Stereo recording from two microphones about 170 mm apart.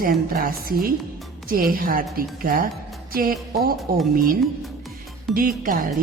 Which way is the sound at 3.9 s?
60° right (ahead or behind).